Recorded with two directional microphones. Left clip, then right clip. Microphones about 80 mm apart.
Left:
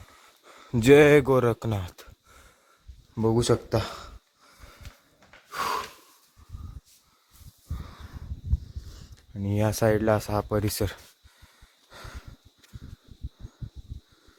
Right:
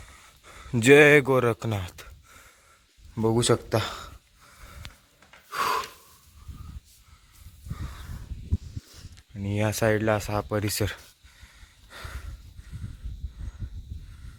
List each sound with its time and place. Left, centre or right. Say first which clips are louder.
0.4 s speech: right 1 dB; centre
3.2 s speech: even; centre
5.5 s gasp: right 3 dB; centre
7.8 s snort: right 3 dB; centre
8.9 s a sound: right 1 dB; left
9.8 s speech: left 1 dB; left
11.9 s a sound: right 3 dB; centre